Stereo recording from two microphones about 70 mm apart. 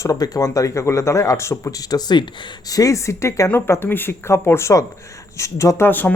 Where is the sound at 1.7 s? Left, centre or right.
Left.